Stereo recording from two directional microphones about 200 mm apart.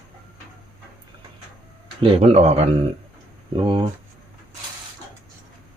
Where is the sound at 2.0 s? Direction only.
30° right (ahead or behind).